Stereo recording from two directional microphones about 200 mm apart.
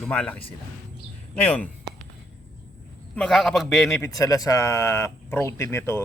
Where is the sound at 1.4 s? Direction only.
10° left (ahead or behind).